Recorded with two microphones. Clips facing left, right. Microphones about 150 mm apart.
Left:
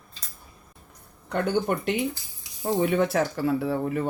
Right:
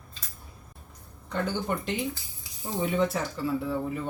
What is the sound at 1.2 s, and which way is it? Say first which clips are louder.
Speech: left 5 dB; 60° left (ahead or behind).